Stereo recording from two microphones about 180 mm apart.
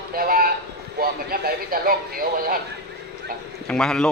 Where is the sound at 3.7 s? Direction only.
5° left (ahead or behind).